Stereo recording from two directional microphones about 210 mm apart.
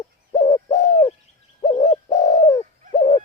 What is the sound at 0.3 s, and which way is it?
Bird, 15° left (ahead or behind).